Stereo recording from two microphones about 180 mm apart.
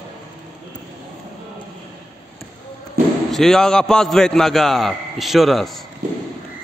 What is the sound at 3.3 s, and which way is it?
A man's voice, centre (ahead or behind).